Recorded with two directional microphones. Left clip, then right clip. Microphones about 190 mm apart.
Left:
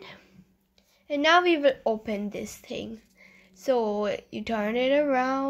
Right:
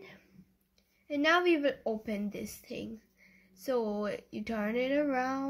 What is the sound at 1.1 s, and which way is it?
A woman's voice, 10° left (ahead or behind).